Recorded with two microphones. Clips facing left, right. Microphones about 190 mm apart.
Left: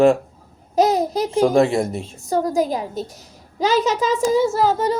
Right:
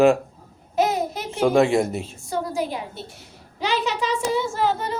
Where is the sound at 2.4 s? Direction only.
40° left (ahead or behind).